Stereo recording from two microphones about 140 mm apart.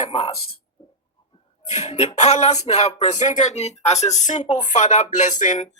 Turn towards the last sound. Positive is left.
turn(degrees=65)  # may be behind; listen again after turning